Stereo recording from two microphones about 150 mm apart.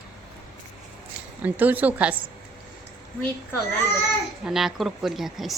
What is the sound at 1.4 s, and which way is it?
Speech, 10° right (ahead or behind).